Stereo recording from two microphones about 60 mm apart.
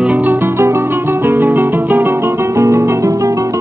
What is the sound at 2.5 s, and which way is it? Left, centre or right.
Music, right.